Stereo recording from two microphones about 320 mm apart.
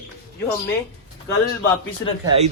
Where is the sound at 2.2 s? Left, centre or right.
Centre.